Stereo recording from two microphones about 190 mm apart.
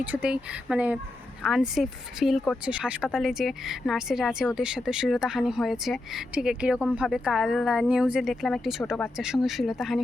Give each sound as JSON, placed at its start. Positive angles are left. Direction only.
{"t": 0.0, "sound": "a woman's voice", "side_deg": -5}